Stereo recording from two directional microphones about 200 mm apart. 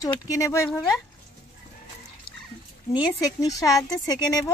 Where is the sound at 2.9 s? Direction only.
15° left (ahead or behind).